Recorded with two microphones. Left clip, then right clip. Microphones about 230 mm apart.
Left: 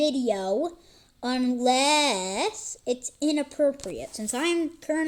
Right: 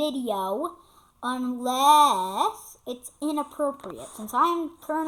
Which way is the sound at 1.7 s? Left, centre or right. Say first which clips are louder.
Right 6 dB; right.